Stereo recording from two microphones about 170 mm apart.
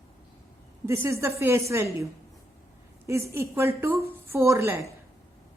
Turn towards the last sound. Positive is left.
turn(degrees=-15)  # may be behind; listen again after turning